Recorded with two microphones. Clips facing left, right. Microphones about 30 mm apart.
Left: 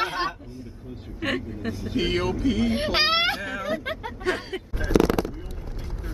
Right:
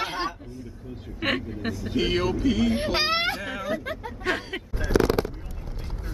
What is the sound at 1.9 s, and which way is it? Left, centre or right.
Speech, centre.